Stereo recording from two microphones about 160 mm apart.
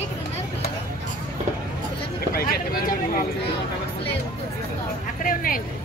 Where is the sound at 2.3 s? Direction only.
65° left (ahead or behind).